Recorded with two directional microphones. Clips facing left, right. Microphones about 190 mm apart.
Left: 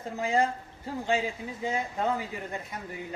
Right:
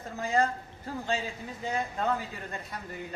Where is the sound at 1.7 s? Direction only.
10° left (ahead or behind).